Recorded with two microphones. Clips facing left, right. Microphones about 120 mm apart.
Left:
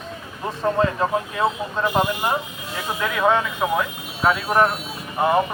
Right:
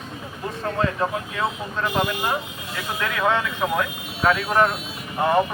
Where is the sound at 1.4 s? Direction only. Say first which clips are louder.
Left 1 dB; 25° left (ahead or behind); by 4.7 s 5° left (ahead or behind).